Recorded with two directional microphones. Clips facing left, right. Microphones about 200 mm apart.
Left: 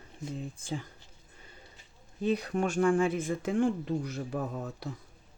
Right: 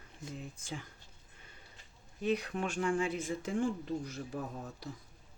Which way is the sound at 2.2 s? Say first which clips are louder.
Left 4 dB; 35° left (ahead or behind).